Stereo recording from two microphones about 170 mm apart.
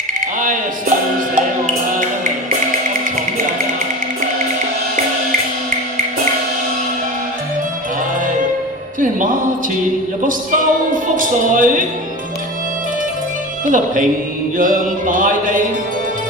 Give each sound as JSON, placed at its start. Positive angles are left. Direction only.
{"t": 0.3, "sound": "music", "side_deg": -50}
{"t": 9.0, "sound": "music", "side_deg": -50}
{"t": 13.7, "sound": "music", "side_deg": -50}